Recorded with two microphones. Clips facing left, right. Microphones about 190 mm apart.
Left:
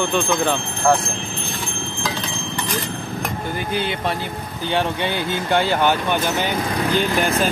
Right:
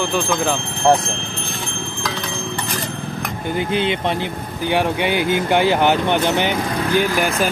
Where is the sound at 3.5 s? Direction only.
20° right (ahead or behind).